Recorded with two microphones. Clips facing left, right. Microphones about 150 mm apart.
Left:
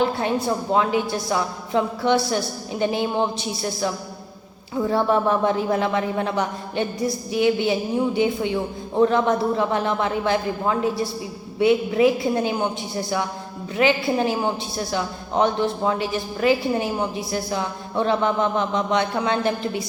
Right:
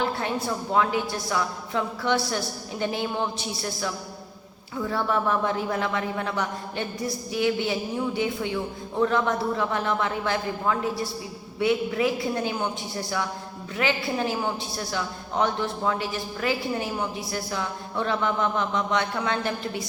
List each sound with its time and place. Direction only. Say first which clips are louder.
0.0 s speech: left 5 dB; 20° left (ahead or behind)